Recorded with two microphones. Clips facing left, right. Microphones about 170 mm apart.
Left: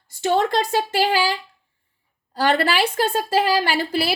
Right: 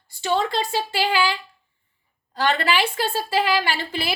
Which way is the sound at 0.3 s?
45° left (ahead or behind).